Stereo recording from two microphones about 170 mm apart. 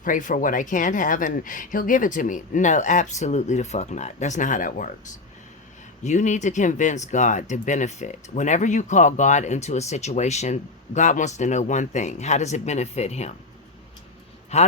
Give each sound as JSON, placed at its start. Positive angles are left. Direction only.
{"t": 0.0, "sound": "speech", "side_deg": 50}
{"t": 6.0, "sound": "speech", "side_deg": 45}
{"t": 14.5, "sound": "speech", "side_deg": 40}